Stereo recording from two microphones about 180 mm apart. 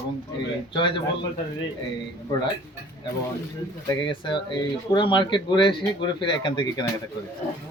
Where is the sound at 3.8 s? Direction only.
25° left (ahead or behind).